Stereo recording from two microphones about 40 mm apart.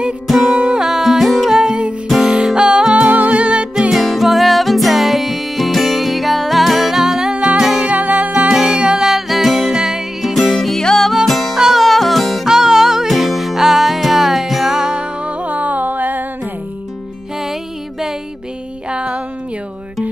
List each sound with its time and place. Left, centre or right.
0.7 s music: centre
1.6 s music: right
3.1 s music: right
3.9 s music: centre
7.3 s music: right
7.9 s music: right
8.5 s music: centre
10.8 s music: centre
11.2 s music: centre
11.5 s music: centre
11.8 s music: centre
12.4 s music: centre
15.2 s music: right
18.9 s a sound: right